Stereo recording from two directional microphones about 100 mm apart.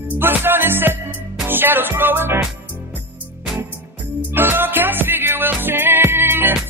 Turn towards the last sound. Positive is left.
turn(degrees=-20)  # may be behind; listen again after turning